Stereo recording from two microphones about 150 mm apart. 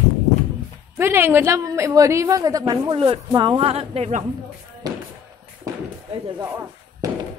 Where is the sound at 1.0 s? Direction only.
15° right (ahead or behind).